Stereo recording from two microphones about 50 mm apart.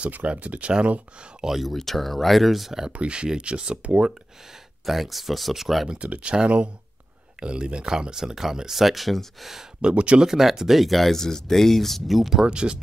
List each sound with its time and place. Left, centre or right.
0.3 s speech: right
1.4 s speech: centre
2.9 s speech: right
4.8 s speech: centre
6.0 s speech: right; by 9.7 s centre
9.8 s speech: right
10.2 s speech: centre
12.4 s speech: centre